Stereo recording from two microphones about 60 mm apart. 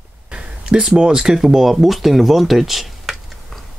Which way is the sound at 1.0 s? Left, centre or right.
Centre.